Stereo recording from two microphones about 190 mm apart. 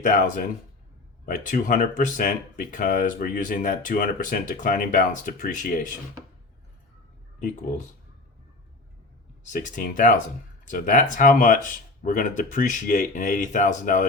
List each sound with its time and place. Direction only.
0.1 s speech: 40° left (ahead or behind)
9.5 s speech: 45° left (ahead or behind)